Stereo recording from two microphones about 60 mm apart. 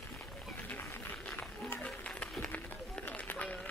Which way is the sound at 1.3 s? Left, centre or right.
Left.